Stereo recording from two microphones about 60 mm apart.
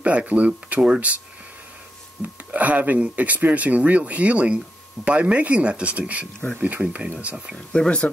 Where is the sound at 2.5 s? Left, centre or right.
Right.